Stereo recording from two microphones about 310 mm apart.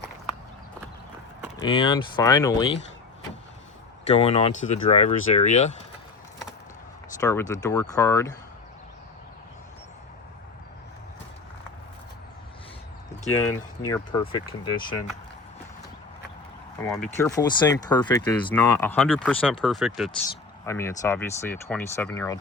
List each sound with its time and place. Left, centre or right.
1.5 s speech: centre
4.1 s speech: centre
7.2 s speech: centre
13.3 s speech: centre
16.9 s speech: centre